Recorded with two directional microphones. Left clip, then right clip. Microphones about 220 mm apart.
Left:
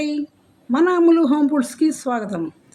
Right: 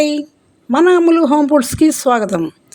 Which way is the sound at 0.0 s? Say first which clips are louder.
Right 9 dB; 45° right (ahead or behind).